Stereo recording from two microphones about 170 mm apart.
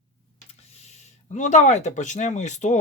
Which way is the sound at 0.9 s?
40° left (ahead or behind).